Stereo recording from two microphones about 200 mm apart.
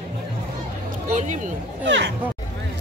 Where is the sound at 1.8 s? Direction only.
60° right (ahead or behind).